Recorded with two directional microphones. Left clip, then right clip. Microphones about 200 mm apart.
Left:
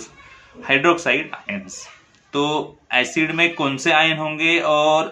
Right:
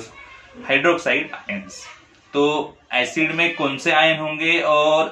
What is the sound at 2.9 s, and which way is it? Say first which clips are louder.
Speech: left 1 dB; 25° left (ahead or behind).